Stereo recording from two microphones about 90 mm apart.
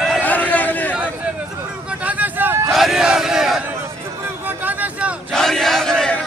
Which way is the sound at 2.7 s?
5° right (ahead or behind).